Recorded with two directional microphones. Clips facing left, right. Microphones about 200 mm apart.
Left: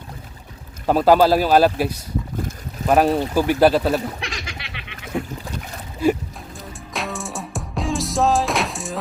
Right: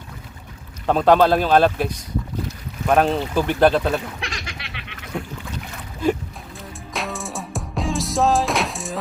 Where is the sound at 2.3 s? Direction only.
50° left (ahead or behind).